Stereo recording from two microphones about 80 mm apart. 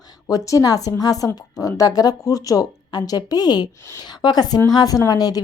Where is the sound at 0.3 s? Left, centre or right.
Left.